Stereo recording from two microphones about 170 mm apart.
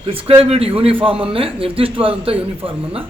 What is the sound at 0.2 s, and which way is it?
Speech, 35° right (ahead or behind).